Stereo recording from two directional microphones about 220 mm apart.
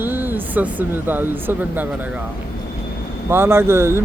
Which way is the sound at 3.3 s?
10° right (ahead or behind).